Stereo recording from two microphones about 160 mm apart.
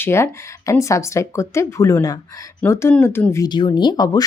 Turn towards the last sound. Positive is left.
turn(degrees=25)  # may be behind; listen again after turning